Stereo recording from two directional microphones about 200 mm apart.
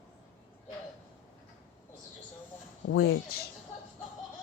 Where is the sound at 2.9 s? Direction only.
60° left (ahead or behind).